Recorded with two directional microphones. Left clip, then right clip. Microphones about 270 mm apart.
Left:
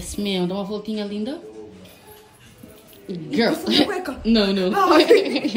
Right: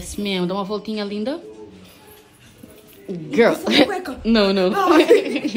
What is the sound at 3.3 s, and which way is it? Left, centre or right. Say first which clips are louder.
A woman's voice: right 4 dB; centre.